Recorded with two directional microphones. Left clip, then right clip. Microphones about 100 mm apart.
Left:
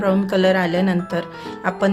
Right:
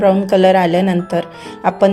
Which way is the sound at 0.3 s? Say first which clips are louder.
Right 6 dB; 30° right (ahead or behind).